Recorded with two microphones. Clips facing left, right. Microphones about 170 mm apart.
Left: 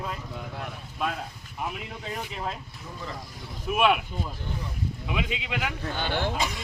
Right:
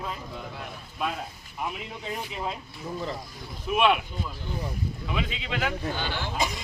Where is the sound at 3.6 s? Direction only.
10° left (ahead or behind).